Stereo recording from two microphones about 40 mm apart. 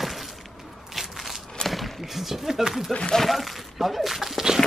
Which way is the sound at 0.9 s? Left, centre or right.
Centre.